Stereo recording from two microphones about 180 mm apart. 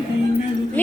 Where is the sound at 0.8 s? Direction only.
10° left (ahead or behind).